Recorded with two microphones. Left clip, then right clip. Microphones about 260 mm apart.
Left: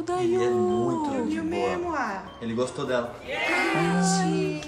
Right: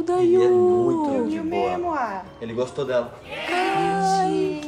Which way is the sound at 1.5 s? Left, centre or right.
Right.